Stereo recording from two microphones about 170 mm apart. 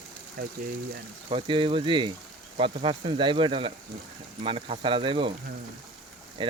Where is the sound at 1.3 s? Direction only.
30° right (ahead or behind).